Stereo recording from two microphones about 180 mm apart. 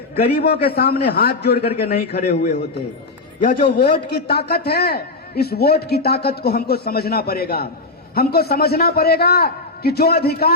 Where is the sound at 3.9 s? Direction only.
60° left (ahead or behind).